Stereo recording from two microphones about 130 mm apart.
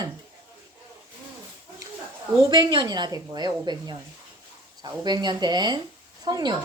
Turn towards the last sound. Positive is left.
turn(degrees=-30)  # may be behind; listen again after turning